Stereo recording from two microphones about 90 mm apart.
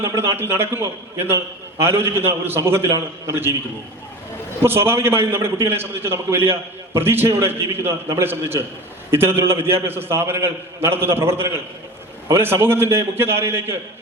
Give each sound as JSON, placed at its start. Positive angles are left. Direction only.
{"t": 0.0, "sound": "a man's voice", "side_deg": -30}
{"t": 4.6, "sound": "a man's voice", "side_deg": -25}